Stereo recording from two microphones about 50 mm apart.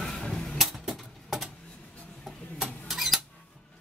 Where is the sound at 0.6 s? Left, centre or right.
Centre.